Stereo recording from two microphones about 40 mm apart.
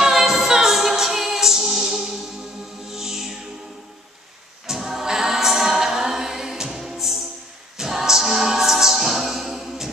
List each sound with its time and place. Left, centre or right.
0.0 s music: centre
4.6 s choir: centre
7.7 s a capella: centre